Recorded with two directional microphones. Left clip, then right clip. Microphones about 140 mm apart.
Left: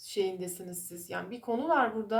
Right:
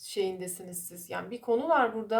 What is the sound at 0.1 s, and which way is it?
A woman's voice, 40° right (ahead or behind).